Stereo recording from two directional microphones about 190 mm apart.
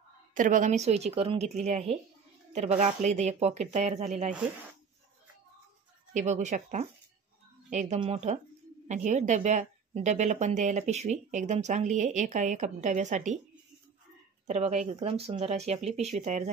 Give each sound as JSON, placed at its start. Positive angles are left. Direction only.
{"t": 0.3, "sound": "a woman's voice", "side_deg": -45}
{"t": 6.1, "sound": "a woman's voice", "side_deg": -40}
{"t": 14.5, "sound": "a woman's voice", "side_deg": -35}